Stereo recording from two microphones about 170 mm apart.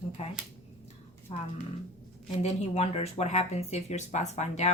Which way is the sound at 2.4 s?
40° left (ahead or behind).